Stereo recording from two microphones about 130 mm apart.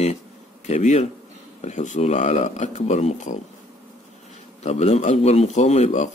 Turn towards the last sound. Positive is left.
turn(degrees=60)  # may be behind; listen again after turning